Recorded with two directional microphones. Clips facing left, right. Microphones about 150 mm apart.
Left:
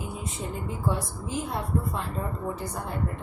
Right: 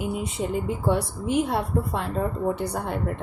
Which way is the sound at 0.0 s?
80° right.